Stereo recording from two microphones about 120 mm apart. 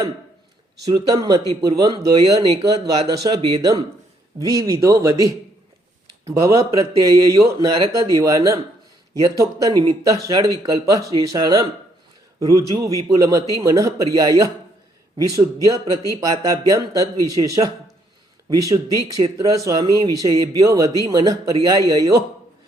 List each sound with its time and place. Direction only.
0.9 s speech: 30° right (ahead or behind)
7.9 s speech: 30° right (ahead or behind)